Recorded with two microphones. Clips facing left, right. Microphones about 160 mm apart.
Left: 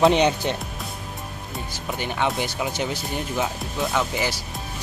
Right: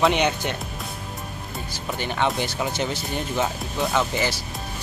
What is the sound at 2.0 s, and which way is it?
Speech, 10° left (ahead or behind).